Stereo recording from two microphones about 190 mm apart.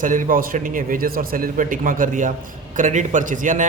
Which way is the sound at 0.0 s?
45° right (ahead or behind).